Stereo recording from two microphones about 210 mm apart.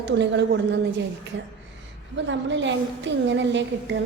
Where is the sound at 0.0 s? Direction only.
55° right (ahead or behind).